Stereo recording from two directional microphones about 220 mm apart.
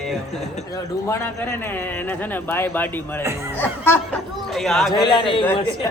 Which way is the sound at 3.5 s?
10° left (ahead or behind).